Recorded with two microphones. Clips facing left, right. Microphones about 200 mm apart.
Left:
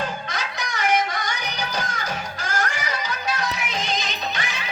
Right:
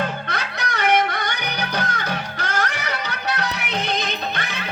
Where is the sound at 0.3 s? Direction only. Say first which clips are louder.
Right 3 dB; 60° right (ahead or behind).